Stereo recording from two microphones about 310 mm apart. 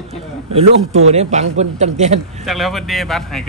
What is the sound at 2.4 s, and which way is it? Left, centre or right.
Speech, centre.